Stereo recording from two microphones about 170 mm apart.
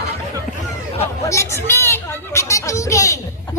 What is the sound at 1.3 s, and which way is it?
Speech, 15° left (ahead or behind).